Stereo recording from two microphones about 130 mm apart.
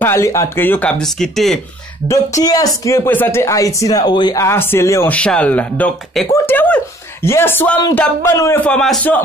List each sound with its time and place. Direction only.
0.0 s speech: 20° left (ahead or behind); by 1.6 s centre (ahead or behind)
2.0 s speech: 25° left (ahead or behind)
4.4 s speech: 20° left (ahead or behind)
5.1 s speech: 10° left (ahead or behind)
8.6 s speech: 5° left (ahead or behind)